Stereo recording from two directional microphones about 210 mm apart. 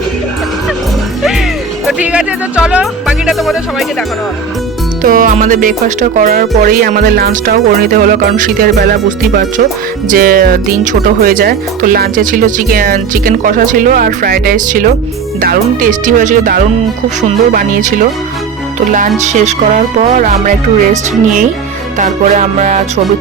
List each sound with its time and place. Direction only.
1.9 s speech: 5° right (ahead or behind)
5.0 s speech: 40° right (ahead or behind)
19.2 s speech: 35° right (ahead or behind)